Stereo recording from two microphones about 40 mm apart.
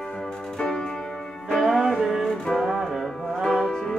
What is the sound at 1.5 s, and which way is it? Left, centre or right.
Music, centre.